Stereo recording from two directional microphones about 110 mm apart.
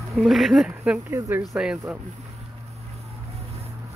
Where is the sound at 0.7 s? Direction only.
15° right (ahead or behind).